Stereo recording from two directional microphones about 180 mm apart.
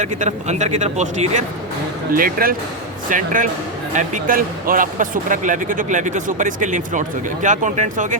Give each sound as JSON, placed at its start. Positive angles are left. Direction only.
{"t": 0.0, "sound": "speech", "side_deg": -40}
{"t": 2.1, "sound": "speech", "side_deg": -55}